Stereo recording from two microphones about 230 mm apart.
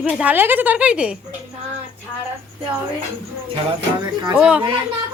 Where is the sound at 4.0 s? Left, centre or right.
Centre.